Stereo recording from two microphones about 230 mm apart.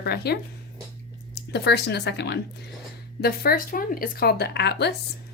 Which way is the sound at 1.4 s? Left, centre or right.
Left.